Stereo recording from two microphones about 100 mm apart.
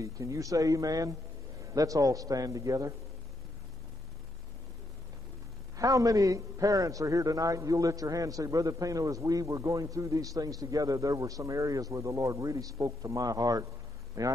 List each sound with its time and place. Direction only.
0.0 s a man's voice: 35° right (ahead or behind)
5.8 s a man's voice: 35° right (ahead or behind)